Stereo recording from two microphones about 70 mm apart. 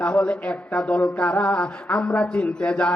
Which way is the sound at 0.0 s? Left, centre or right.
Centre.